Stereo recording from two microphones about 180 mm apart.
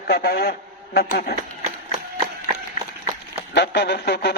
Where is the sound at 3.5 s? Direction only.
70° left (ahead or behind).